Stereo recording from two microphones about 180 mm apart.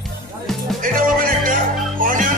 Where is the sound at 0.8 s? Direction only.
50° right (ahead or behind).